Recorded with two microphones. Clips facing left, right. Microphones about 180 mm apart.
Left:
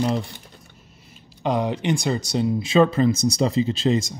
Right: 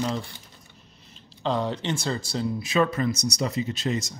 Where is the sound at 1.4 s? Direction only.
15° left (ahead or behind).